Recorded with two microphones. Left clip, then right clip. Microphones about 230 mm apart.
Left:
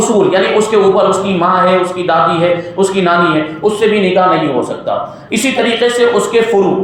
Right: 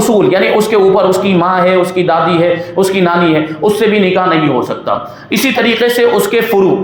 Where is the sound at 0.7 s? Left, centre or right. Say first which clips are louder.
Even; right.